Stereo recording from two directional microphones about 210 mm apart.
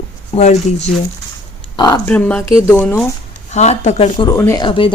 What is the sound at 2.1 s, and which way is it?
Speech, 5° left (ahead or behind).